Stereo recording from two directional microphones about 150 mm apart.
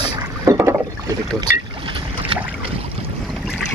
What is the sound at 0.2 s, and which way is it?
Rowboat, 25° right (ahead or behind).